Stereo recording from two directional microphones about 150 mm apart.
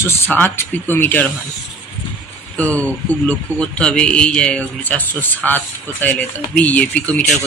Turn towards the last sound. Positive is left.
turn(degrees=10)  # may be behind; listen again after turning